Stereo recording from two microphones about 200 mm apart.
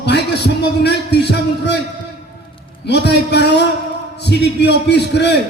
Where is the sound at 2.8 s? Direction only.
55° left (ahead or behind).